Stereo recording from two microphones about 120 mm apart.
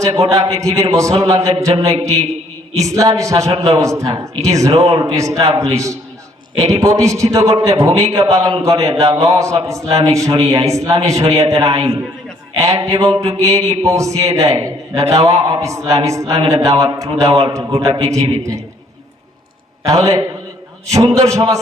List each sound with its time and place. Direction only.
0.2 s a man's voice: 30° right (ahead or behind)
19.8 s a man's voice: 25° right (ahead or behind)